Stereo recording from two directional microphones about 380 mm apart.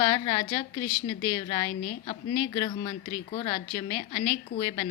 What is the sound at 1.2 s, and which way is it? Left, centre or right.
A woman's voice, left.